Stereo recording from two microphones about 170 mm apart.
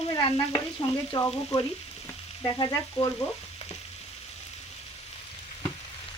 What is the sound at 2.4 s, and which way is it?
Frying, 25° left (ahead or behind).